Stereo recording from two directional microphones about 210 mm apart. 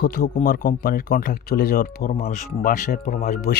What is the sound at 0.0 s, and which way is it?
Speech, 45° left (ahead or behind).